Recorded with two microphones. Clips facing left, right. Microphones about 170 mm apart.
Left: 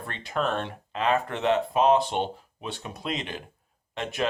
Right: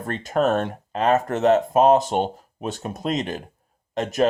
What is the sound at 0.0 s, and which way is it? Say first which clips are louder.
Speech: right 7 dB; 45° right (ahead or behind).